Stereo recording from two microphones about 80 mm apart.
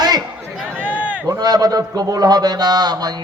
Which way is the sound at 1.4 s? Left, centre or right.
Right.